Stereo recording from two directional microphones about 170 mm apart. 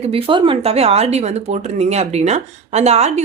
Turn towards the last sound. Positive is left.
turn(degrees=-40)  # may be behind; listen again after turning